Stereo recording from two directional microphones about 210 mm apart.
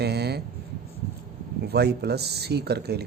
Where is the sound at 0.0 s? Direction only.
50° right (ahead or behind).